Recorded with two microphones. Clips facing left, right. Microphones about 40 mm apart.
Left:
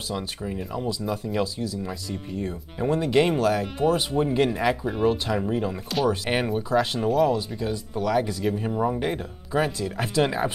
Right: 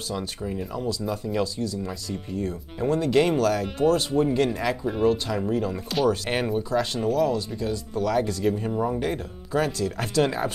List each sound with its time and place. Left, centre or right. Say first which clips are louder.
0.1 s speech: even; centre
3.6 s speech: right 1 dB; centre